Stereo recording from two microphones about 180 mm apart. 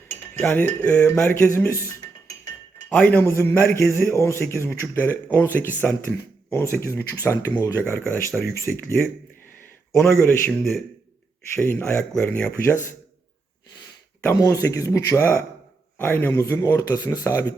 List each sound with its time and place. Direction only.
0.3 s speech: 10° left (ahead or behind)
2.9 s speech: 10° left (ahead or behind)
10.2 s speech: 10° left (ahead or behind)
11.7 s speech: 15° left (ahead or behind)
14.3 s speech: 20° left (ahead or behind)